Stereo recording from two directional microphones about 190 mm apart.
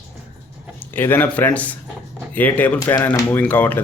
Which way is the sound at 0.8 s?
10° left (ahead or behind).